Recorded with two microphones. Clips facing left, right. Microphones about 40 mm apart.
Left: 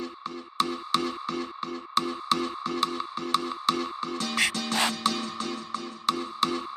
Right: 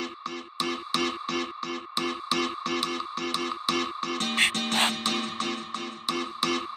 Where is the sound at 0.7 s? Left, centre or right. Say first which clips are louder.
Even; right.